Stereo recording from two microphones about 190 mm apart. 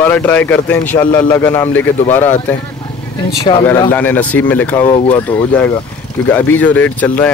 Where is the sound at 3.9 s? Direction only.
10° left (ahead or behind).